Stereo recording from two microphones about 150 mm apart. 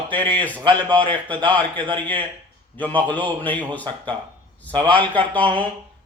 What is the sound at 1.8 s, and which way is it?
Speech, 30° right (ahead or behind).